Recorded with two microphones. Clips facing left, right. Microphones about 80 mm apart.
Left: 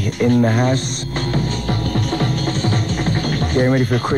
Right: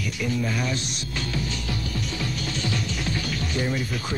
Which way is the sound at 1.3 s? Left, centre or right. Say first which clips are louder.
Left 10 dB; left.